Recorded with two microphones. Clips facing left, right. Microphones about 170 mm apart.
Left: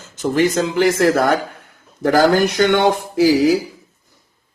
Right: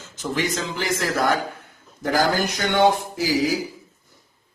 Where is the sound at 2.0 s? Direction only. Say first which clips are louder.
Left 8 dB; 65° left (ahead or behind).